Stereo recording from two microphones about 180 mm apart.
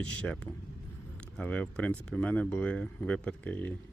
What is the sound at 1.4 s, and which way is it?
Speech, 10° left (ahead or behind).